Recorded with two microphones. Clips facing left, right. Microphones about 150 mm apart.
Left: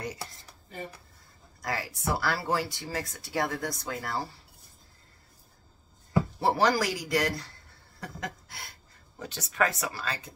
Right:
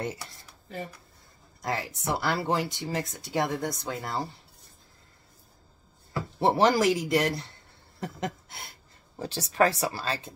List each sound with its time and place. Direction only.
1.6 s speech: 20° right (ahead or behind)
6.4 s speech: 25° right (ahead or behind)
8.0 s a sound: 25° right (ahead or behind)
9.2 s speech: 30° right (ahead or behind)